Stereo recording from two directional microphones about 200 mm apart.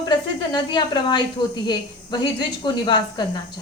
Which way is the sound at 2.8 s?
20° left (ahead or behind).